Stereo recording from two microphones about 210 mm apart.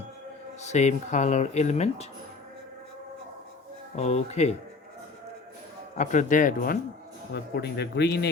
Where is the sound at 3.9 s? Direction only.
30° left (ahead or behind).